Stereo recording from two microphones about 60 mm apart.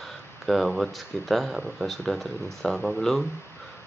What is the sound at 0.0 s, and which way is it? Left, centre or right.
Speech, centre.